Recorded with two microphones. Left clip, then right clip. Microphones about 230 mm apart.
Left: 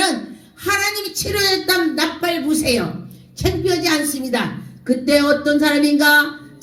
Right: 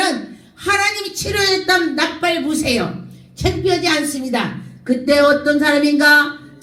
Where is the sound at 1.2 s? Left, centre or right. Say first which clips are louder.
Right 1 dB; left.